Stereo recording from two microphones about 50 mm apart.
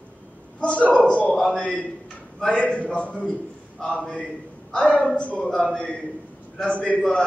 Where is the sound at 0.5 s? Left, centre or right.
Left.